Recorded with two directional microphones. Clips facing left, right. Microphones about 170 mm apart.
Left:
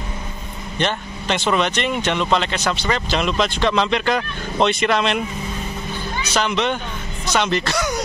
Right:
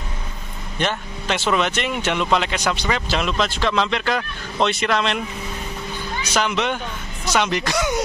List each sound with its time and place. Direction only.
0.7 s speech: 5° right (ahead or behind)
6.3 s speech: 10° right (ahead or behind)